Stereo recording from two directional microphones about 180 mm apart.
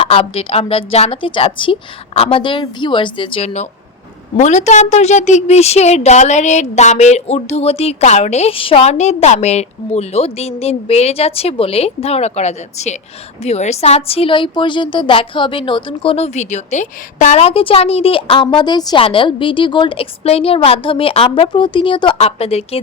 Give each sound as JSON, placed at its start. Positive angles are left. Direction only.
{"t": 0.0, "sound": "a woman's voice", "side_deg": 30}